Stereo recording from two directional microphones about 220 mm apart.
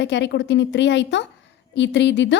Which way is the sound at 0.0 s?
55° left (ahead or behind).